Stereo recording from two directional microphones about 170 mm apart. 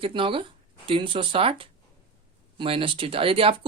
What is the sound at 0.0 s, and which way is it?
Speech, 30° right (ahead or behind).